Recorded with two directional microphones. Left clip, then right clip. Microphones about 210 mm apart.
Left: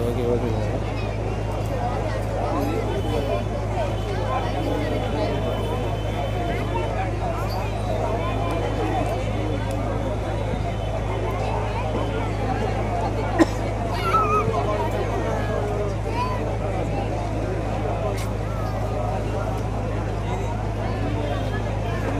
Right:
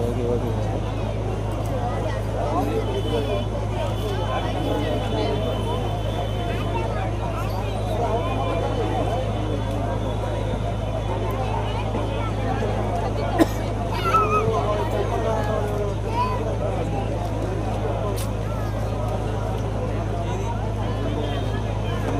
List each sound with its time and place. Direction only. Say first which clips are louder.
13.4 s vehicle: left 1 dB; 55° right (ahead or behind)
14.0 s vehicle: right 1 dB; 30° right (ahead or behind)